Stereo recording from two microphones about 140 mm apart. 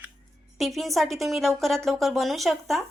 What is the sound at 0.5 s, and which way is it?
A woman's voice, centre (ahead or behind).